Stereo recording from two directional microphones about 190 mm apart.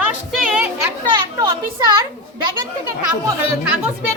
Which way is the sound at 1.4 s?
20° right (ahead or behind).